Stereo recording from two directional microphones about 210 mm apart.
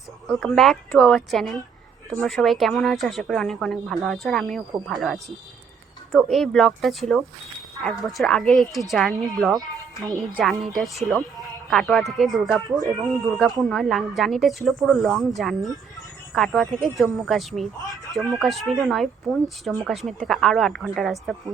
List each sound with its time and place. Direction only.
0.3 s a woman's voice: centre (ahead or behind)
12.8 s speech: 20° right (ahead or behind)
13.2 s a woman's voice: centre (ahead or behind)